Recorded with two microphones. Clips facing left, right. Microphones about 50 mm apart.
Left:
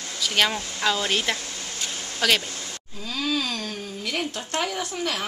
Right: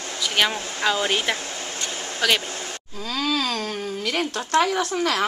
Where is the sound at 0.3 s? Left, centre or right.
Centre.